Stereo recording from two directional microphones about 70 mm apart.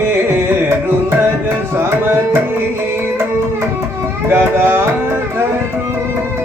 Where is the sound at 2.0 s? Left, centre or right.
Right.